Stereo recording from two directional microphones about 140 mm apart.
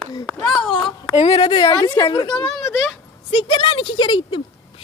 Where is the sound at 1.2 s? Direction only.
50° left (ahead or behind).